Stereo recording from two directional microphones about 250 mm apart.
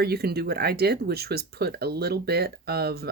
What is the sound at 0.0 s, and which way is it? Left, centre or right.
Speech, right.